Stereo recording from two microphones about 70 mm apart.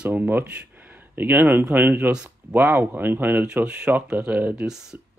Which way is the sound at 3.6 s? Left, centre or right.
Centre.